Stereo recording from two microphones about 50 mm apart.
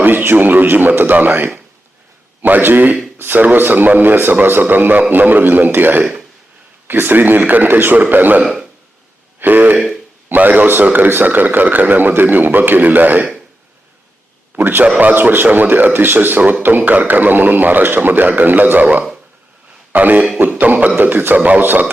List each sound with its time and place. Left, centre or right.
0.0 s a man's voice: right
9.4 s throat clearing: right
10.2 s a man's voice: right
14.6 s a man's voice: right
14.8 s a man's voice: right
21.3 s a man's voice: right
21.6 s a man's voice: right